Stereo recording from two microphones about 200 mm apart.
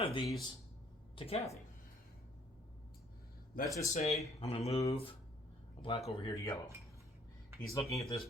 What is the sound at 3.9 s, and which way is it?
A man's voice, 35° left (ahead or behind).